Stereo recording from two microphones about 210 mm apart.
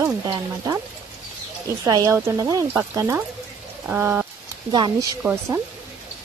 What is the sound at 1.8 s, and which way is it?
Speech, 15° right (ahead or behind).